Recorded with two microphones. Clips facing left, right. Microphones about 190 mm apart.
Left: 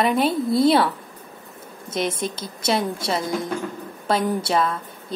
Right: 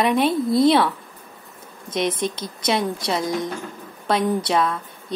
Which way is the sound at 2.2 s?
5° left (ahead or behind).